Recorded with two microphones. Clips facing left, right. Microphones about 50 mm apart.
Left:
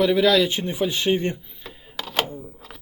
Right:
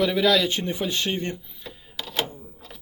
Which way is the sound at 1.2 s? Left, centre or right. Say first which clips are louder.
Left 4 dB; left.